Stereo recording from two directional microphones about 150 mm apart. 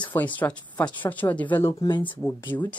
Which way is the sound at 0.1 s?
10° left (ahead or behind).